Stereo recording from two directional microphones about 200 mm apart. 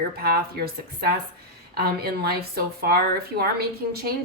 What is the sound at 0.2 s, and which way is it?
A woman's voice, 50° right (ahead or behind).